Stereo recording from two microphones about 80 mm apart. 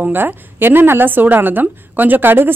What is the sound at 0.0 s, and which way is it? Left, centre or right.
A woman's voice, right.